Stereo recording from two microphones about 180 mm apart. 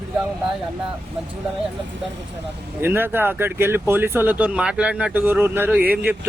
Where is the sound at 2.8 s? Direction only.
10° right (ahead or behind).